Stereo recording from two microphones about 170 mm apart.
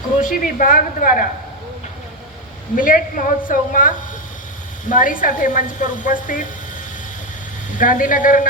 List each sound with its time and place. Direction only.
0.2 s a woman's voice: 50° left (ahead or behind)
2.7 s a woman's voice: 55° left (ahead or behind)
7.8 s a woman's voice: 50° left (ahead or behind)